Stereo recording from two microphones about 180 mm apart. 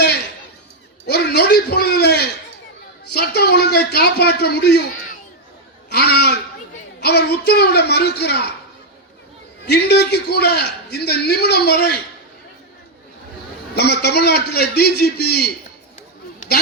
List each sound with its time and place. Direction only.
1.0 s a sound: 65° left (ahead or behind)
7.0 s speech: 65° left (ahead or behind)
9.6 s a man's voice: 65° left (ahead or behind)
13.7 s a man's voice: 65° left (ahead or behind)